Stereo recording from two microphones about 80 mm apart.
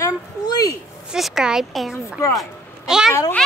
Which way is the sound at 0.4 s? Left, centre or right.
Left.